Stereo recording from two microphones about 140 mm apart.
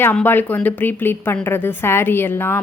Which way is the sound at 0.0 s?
10° left (ahead or behind).